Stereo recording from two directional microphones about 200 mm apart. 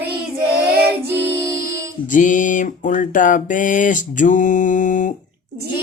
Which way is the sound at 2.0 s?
40° left (ahead or behind).